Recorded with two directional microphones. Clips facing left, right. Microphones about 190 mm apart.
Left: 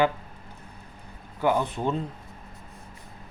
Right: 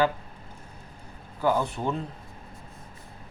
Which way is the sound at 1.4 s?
15° left (ahead or behind).